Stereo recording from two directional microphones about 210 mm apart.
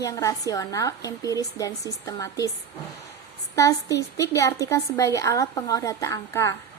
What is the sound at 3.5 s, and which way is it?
Speech, 15° left (ahead or behind).